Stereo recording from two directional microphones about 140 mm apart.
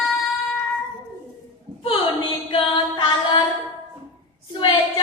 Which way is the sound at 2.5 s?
35° left (ahead or behind).